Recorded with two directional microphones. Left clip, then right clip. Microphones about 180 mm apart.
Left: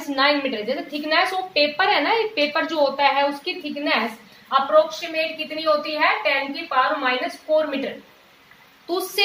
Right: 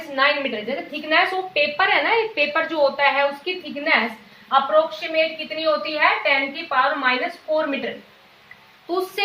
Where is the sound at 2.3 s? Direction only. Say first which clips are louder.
Right 1 dB; 25° left (ahead or behind).